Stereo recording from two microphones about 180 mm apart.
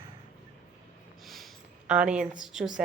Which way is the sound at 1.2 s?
Centre (ahead or behind).